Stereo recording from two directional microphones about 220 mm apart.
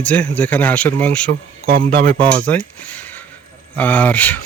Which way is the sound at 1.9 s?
40° right (ahead or behind).